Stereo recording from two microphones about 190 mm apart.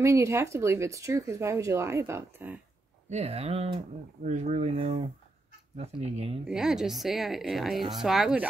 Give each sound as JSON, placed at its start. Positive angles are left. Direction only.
{"t": 0.0, "sound": "speech", "side_deg": -15}
{"t": 3.1, "sound": "speech", "side_deg": -35}
{"t": 6.4, "sound": "a woman's voice", "side_deg": -5}